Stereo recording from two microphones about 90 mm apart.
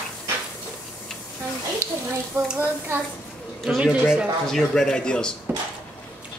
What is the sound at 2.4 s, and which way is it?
Speech, 35° right (ahead or behind).